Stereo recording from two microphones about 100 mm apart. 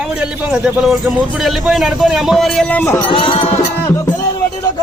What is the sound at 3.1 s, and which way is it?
Music, 65° left (ahead or behind).